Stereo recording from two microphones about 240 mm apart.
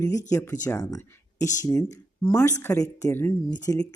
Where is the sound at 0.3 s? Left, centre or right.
Centre.